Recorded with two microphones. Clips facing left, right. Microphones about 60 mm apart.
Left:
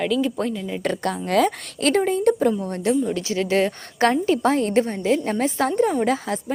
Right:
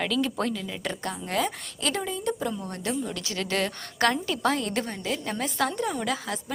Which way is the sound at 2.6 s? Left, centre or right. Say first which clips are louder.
Left 9 dB; left.